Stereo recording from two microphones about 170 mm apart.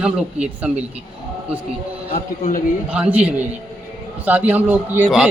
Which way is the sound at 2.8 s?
10° right (ahead or behind).